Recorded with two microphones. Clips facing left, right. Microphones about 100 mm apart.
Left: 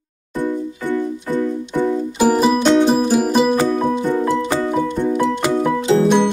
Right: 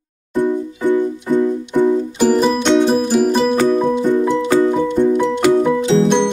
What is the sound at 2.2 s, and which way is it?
Music, 10° left (ahead or behind).